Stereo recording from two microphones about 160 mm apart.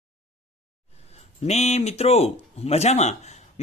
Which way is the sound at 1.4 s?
45° left (ahead or behind).